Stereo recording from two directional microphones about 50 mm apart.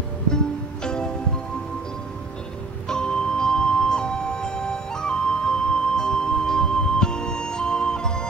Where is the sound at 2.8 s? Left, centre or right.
Centre.